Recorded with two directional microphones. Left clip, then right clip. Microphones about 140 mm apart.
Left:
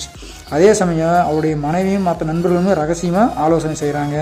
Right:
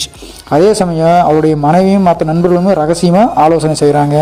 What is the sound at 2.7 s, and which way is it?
Speech, 35° right (ahead or behind).